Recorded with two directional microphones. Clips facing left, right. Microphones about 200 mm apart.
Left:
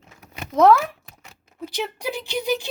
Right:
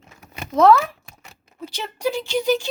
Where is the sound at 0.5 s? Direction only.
15° left (ahead or behind).